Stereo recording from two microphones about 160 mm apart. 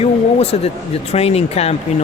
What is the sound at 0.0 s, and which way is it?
Speech, 40° left (ahead or behind).